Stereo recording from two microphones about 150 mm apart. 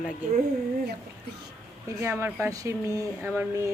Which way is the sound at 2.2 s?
20° right (ahead or behind).